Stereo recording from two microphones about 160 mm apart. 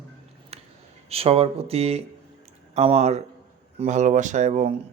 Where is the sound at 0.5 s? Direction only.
40° right (ahead or behind).